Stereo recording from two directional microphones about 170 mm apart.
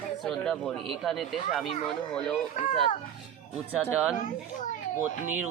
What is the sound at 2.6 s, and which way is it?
Speech, 50° left (ahead or behind).